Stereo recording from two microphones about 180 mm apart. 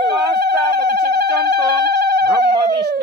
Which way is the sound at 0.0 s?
65° right (ahead or behind).